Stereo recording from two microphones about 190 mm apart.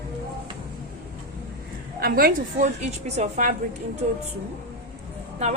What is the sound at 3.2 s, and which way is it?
Speech, 40° right (ahead or behind).